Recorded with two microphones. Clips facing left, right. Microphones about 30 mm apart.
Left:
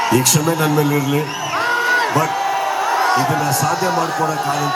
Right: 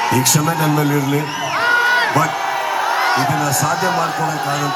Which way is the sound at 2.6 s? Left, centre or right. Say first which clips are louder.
Even; right.